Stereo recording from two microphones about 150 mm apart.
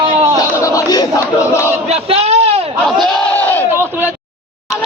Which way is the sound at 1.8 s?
45° right (ahead or behind).